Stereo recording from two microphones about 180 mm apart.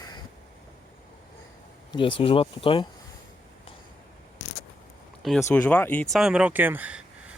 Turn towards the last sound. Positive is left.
turn(degrees=-10)  # may be behind; listen again after turning